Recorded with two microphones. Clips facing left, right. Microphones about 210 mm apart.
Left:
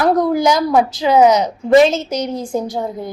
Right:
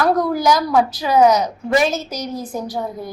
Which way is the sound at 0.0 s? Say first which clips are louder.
Left 3 dB; 20° left (ahead or behind).